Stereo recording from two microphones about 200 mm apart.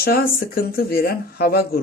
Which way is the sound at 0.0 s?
45° left (ahead or behind).